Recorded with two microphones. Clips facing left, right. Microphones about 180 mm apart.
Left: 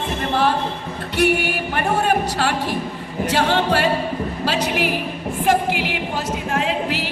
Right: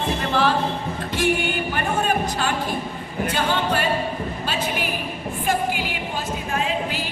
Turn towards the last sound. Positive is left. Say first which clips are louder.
# left 4 dB
turn(degrees=80)